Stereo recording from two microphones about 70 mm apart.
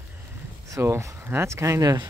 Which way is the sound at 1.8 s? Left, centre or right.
Right.